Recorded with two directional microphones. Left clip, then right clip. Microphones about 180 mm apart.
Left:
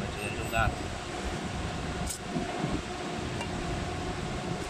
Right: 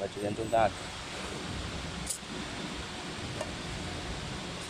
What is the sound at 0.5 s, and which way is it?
Speech, 40° right (ahead or behind).